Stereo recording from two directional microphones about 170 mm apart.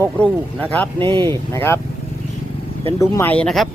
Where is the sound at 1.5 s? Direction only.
15° left (ahead or behind).